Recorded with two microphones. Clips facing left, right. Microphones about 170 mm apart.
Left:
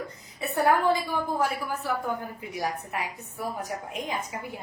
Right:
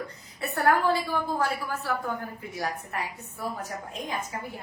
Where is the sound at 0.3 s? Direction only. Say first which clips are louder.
Left 1 dB; 15° left (ahead or behind).